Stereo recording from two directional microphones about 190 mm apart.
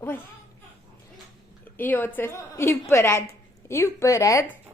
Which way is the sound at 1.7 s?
10° left (ahead or behind).